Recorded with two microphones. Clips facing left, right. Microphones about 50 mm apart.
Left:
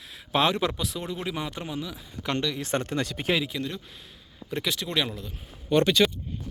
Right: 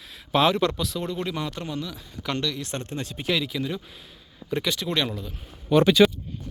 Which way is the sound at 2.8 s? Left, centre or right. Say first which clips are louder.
Left 3 dB; left.